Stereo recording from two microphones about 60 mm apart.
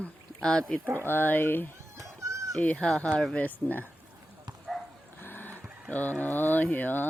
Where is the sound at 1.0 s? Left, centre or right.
Left.